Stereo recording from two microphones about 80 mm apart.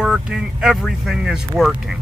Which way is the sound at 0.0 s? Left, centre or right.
Centre.